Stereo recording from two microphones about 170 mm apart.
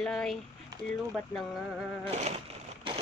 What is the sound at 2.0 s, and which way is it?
Speech, 40° right (ahead or behind).